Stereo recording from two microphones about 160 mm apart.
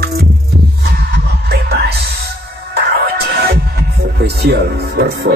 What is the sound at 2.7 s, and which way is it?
Speech, 75° right (ahead or behind).